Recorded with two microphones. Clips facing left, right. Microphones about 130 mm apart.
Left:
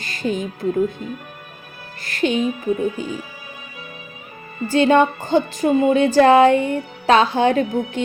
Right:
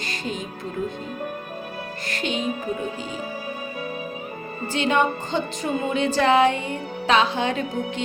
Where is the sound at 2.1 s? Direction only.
30° right (ahead or behind).